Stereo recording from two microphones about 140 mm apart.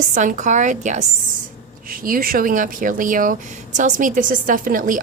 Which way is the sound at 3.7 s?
65° right (ahead or behind).